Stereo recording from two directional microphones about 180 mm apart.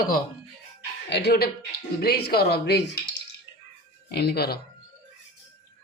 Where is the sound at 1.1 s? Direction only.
60° left (ahead or behind).